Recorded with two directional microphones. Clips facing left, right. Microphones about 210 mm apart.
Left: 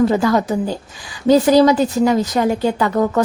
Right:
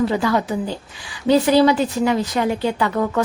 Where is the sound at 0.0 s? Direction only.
45° left (ahead or behind).